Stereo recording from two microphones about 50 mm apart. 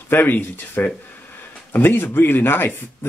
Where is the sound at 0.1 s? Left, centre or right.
Left.